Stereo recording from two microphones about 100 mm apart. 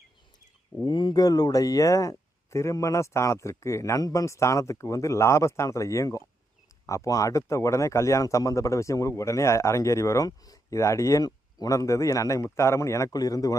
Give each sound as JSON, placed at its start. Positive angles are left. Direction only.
{"t": 0.9, "sound": "speech", "side_deg": 50}